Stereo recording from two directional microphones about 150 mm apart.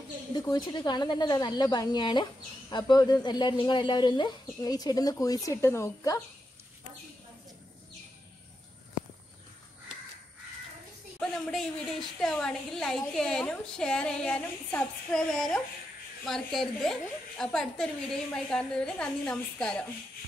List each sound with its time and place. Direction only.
0.4 s speech: 25° left (ahead or behind)
11.1 s a woman's voice: centre (ahead or behind)